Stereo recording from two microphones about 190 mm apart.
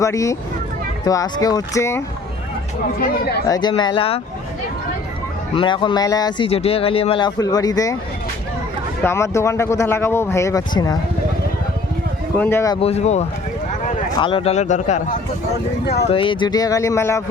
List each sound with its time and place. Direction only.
0.0 s speech: 15° left (ahead or behind)
3.4 s speech: 20° left (ahead or behind)
5.5 s speech: 25° left (ahead or behind)
9.0 s speech: 15° left (ahead or behind)
12.4 s speech: 10° left (ahead or behind)
12.8 s speech: 35° left (ahead or behind)
16.0 s speech: 30° left (ahead or behind)